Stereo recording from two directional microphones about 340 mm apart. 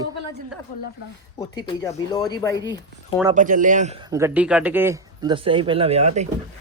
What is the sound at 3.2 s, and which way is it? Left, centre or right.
A man's voice, right.